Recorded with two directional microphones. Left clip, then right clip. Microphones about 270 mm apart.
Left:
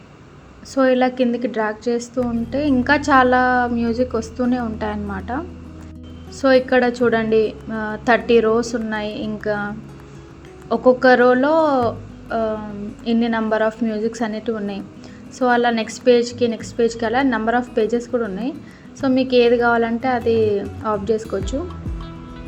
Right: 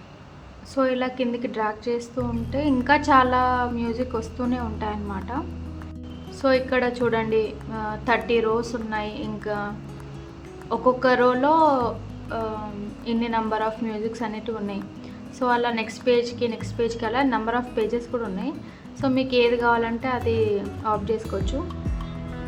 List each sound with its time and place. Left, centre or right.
0.7 s a woman's voice: centre
6.4 s a woman's voice: centre